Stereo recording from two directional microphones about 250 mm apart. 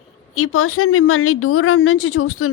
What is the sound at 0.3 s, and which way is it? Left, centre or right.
A woman's voice, left.